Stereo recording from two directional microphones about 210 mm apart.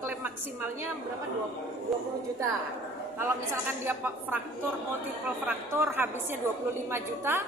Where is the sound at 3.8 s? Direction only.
10° right (ahead or behind).